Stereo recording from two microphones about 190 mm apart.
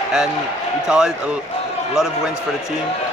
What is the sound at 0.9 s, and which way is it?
Speech, 5° right (ahead or behind).